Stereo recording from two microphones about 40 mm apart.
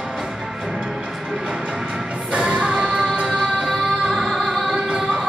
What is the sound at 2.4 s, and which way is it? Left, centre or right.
Music, right.